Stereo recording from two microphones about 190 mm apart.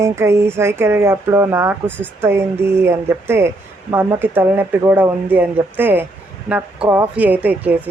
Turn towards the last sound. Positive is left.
turn(degrees=-10)  # may be behind; listen again after turning